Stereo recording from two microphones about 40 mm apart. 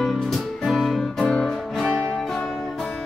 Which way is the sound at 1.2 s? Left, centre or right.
Left.